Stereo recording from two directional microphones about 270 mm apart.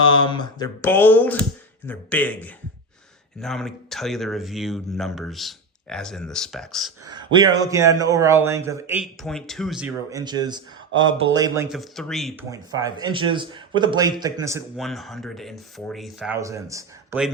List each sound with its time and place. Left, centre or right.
0.0 s mantra: centre
1.9 s speech: centre
7.2 s a man's voice: centre
12.5 s a man's voice: centre
14.8 s speech: centre